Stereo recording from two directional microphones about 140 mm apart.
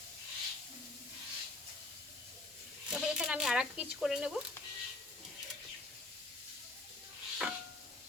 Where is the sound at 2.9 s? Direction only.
5° right (ahead or behind).